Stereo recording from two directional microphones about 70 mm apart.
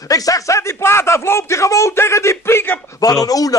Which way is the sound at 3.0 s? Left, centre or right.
Left.